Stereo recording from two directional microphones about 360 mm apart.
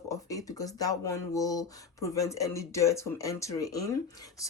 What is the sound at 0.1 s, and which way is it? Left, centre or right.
Speech, centre.